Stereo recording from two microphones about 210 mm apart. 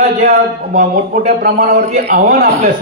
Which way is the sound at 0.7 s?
40° right (ahead or behind).